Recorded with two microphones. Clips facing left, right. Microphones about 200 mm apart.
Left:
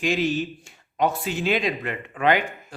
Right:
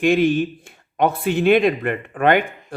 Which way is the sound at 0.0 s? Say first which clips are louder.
Right 7 dB; 55° right (ahead or behind).